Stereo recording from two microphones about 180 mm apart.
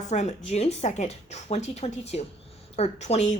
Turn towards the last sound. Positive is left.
turn(degrees=40)  # may be behind; listen again after turning